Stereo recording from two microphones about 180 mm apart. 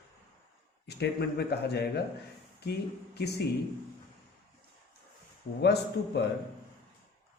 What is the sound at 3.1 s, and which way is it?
Speech, 65° left (ahead or behind).